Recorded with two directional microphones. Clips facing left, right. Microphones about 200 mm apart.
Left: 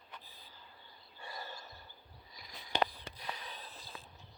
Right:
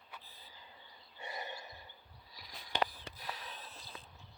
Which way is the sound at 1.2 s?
20° right (ahead or behind).